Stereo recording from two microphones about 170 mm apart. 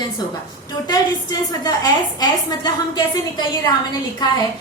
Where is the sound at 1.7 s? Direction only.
25° left (ahead or behind).